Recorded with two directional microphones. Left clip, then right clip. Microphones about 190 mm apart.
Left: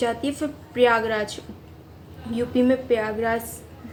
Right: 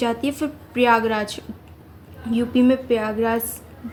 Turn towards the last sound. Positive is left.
turn(degrees=-35)  # may be behind; listen again after turning